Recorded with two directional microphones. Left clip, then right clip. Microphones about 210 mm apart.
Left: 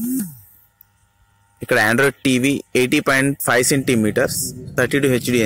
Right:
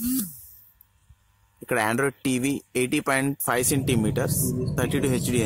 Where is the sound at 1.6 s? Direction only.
10° left (ahead or behind).